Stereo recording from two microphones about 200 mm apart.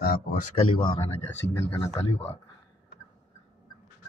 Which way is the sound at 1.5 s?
15° left (ahead or behind).